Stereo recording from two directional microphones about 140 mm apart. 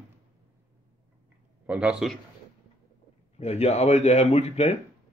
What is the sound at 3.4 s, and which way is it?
Speech, 50° left (ahead or behind).